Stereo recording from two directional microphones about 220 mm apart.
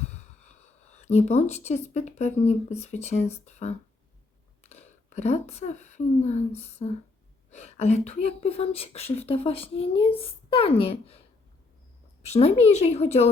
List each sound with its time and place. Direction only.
0.4 s speech: 30° left (ahead or behind)
12.3 s speech: 30° left (ahead or behind)